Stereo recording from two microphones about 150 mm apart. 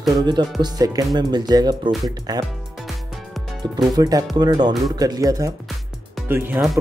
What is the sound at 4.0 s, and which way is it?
Speech, 25° right (ahead or behind).